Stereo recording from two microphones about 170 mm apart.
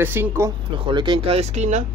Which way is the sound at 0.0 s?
10° right (ahead or behind).